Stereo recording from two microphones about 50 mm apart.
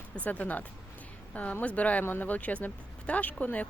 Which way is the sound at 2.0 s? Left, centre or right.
Left.